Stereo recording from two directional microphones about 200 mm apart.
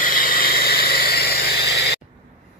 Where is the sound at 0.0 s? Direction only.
45° left (ahead or behind).